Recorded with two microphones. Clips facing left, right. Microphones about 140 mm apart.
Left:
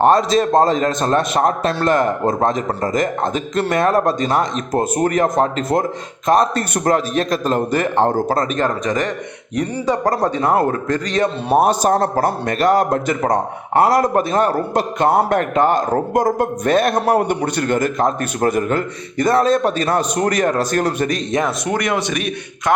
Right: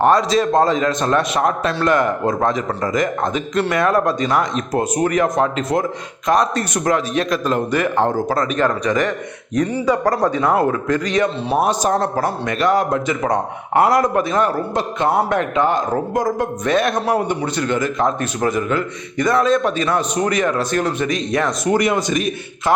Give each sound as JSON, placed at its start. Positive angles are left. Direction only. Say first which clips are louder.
{"t": 0.2, "sound": "a man's voice", "louder": "left 1 dB", "side_deg": 45}
{"t": 2.5, "sound": "a man's voice", "louder": "left 1 dB", "side_deg": 45}
{"t": 4.7, "sound": "a man's voice", "louder": "left 1 dB", "side_deg": 45}
{"t": 6.2, "sound": "a man's voice", "louder": "left 2 dB", "side_deg": 30}
{"t": 6.5, "sound": "a man's voice", "louder": "left 1 dB", "side_deg": 50}
{"t": 11.4, "sound": "a man's voice", "louder": "left 3 dB", "side_deg": 45}
{"t": 21.8, "sound": "a man's voice", "louder": "right 2 dB", "side_deg": 0}